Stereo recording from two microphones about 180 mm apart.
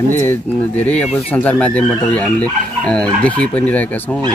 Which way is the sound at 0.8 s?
10° left (ahead or behind).